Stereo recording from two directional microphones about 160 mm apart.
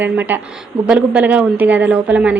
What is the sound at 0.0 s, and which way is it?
A woman's voice, 10° right (ahead or behind).